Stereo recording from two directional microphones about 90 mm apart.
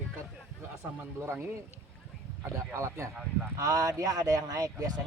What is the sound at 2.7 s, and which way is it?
Speech, 30° right (ahead or behind).